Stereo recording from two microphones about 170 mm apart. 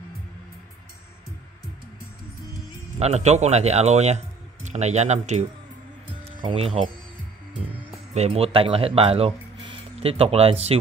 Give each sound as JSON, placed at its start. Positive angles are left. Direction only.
{"t": 3.0, "sound": "a man's voice", "side_deg": -40}
{"t": 8.1, "sound": "speech", "side_deg": -40}